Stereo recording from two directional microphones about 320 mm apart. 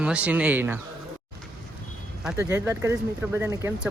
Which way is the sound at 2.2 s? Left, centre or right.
Centre.